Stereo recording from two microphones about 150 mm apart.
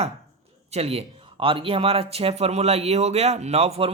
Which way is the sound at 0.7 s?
45° right (ahead or behind).